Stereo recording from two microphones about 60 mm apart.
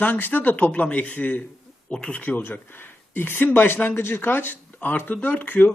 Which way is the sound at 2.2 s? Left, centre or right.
Left.